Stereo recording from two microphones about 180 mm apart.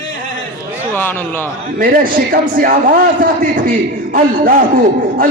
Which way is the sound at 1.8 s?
50° right (ahead or behind).